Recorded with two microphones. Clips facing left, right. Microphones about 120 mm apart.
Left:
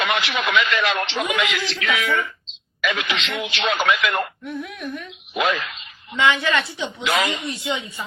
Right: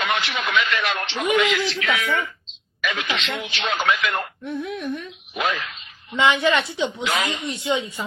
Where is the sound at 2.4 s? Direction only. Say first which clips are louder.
Left 3 dB; 90° left.